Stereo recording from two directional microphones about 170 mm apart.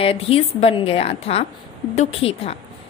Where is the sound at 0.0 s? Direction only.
35° left (ahead or behind).